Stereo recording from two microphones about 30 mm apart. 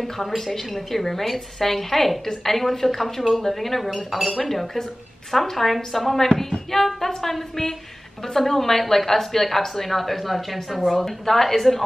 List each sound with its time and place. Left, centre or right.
0.4 s a woman's voice: centre
3.2 s speech: centre
3.4 s a woman's voice: centre